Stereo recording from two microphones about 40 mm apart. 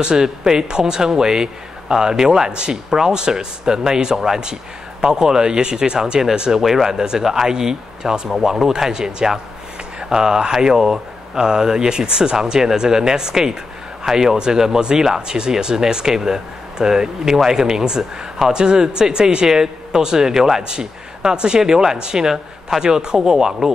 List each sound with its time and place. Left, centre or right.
0.0 s speech: centre
6.6 s speech: centre
7.2 s speech: centre